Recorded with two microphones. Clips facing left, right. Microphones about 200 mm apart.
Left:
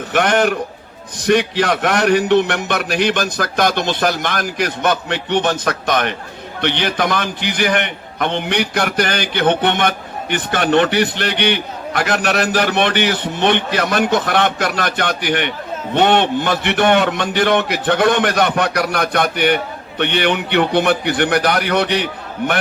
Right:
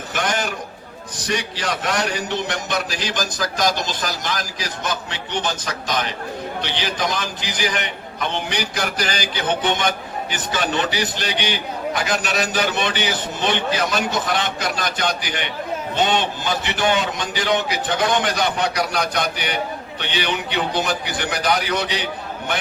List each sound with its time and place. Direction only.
0.1 s a man's voice: 60° left (ahead or behind)